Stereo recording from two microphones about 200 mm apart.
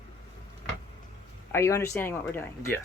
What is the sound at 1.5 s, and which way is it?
Speech, 15° left (ahead or behind).